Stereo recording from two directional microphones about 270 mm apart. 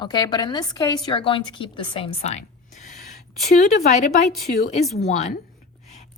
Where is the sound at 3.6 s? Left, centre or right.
Left.